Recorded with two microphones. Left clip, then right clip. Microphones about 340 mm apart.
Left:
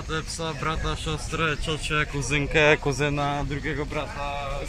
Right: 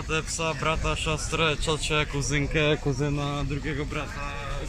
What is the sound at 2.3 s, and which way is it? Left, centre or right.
Speech, centre.